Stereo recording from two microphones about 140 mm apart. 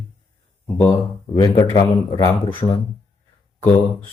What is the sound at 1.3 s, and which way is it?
Speech, 25° left (ahead or behind).